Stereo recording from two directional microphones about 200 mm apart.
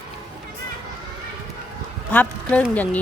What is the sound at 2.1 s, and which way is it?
Speech, 10° left (ahead or behind).